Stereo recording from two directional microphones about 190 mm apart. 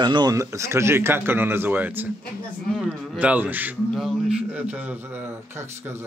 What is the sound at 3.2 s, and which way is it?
A man's voice, 10° right (ahead or behind).